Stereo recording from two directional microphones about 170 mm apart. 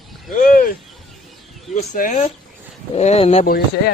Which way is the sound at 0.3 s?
50° left (ahead or behind).